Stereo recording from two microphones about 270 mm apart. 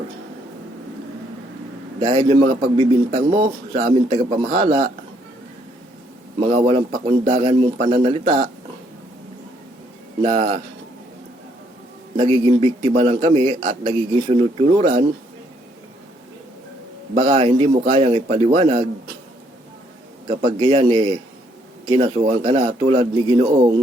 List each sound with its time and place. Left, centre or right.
2.0 s a man's voice: right
6.4 s a man's voice: right
10.2 s a man's voice: right
12.1 s a man's voice: centre
17.2 s a man's voice: right
20.2 s a man's voice: right